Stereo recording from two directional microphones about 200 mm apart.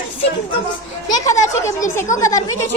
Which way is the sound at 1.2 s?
15° left (ahead or behind).